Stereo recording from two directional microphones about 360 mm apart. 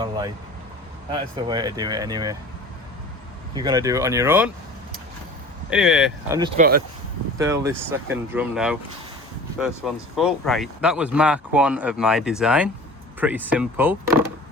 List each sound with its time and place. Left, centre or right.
1.1 s speech: centre
3.5 s speech: centre
5.7 s speech: centre
6.6 s speech: right
7.3 s speech: centre